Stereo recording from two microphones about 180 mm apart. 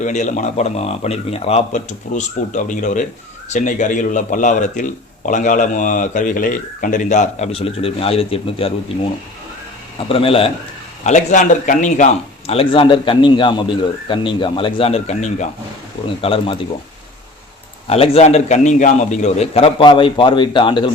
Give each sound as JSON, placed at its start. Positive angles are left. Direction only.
{"t": 0.0, "sound": "speech", "side_deg": 45}
{"t": 10.1, "sound": "a man's voice", "side_deg": 30}
{"t": 11.0, "sound": "a man's voice", "side_deg": 40}
{"t": 17.8, "sound": "a man's voice", "side_deg": 35}